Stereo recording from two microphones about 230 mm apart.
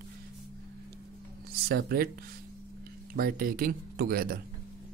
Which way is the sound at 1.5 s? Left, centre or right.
Right.